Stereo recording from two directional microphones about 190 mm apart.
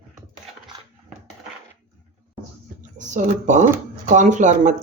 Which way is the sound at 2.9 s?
40° right (ahead or behind).